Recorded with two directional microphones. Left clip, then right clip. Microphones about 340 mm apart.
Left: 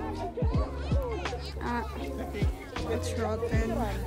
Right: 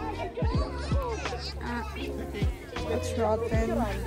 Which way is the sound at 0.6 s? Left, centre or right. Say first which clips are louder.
Right 1 dB; right.